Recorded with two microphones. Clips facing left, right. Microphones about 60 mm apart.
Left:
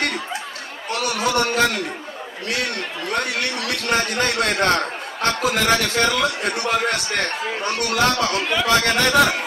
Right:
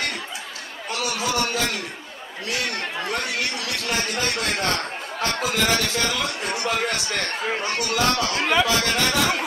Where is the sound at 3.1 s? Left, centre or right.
Left.